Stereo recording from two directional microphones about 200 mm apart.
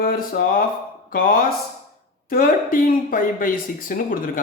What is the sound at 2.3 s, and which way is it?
Speech, 45° left (ahead or behind).